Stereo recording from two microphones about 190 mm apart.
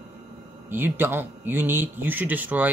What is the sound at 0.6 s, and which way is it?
Speech, 10° right (ahead or behind).